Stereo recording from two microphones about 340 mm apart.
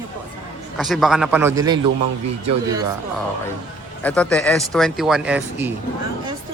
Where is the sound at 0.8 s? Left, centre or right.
Centre.